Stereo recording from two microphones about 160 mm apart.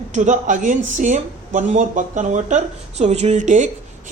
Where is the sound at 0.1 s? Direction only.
50° right (ahead or behind).